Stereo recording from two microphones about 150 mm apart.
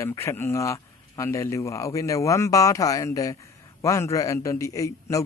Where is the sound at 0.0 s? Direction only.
20° left (ahead or behind).